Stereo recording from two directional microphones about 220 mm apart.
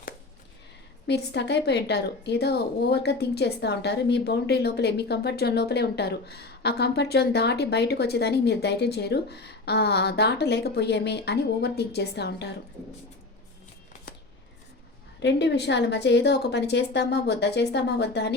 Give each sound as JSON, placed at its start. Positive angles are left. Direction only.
{"t": 1.0, "sound": "a woman's voice", "side_deg": 50}
{"t": 15.2, "sound": "a woman's voice", "side_deg": 50}